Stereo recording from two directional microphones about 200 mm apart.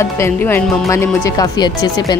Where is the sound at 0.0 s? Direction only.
10° left (ahead or behind).